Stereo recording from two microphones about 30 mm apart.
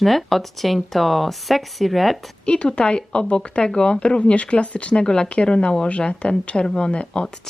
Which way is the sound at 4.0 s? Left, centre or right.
Left.